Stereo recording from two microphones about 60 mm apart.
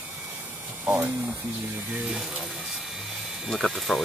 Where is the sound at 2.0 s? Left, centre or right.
Centre.